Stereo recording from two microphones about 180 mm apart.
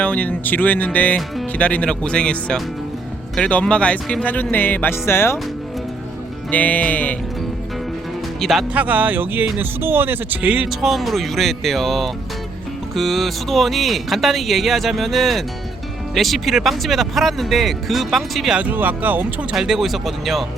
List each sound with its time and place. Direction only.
0.0 s speech: 5° left (ahead or behind)
6.5 s speech: 10° left (ahead or behind)
8.4 s speech: centre (ahead or behind)